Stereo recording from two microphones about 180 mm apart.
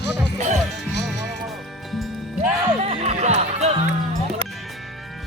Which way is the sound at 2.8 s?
35° right (ahead or behind).